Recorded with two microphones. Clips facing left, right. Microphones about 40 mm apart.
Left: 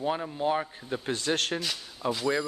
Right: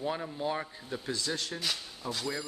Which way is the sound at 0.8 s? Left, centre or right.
Left.